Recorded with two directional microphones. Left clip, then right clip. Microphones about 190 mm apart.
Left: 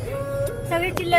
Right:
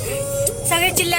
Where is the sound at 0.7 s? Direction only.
10° right (ahead or behind).